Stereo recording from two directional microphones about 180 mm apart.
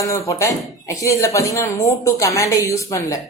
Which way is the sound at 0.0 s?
15° left (ahead or behind).